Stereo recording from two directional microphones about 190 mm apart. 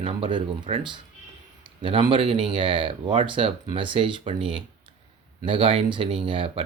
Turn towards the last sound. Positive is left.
turn(degrees=-25)  # may be behind; listen again after turning